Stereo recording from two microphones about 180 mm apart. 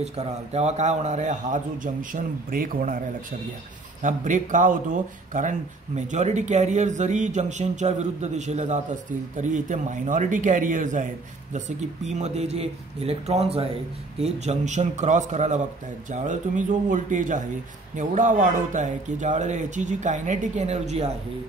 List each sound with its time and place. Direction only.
0.0 s speech: 35° right (ahead or behind); by 3.0 s 50° right (ahead or behind)
4.0 s a man's voice: 45° right (ahead or behind)